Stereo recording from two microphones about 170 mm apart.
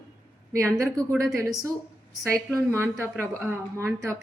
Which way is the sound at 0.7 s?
15° right (ahead or behind).